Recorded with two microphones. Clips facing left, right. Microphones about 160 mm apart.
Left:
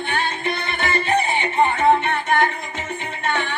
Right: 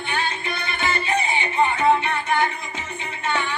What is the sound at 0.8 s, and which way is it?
Music, 55° left (ahead or behind).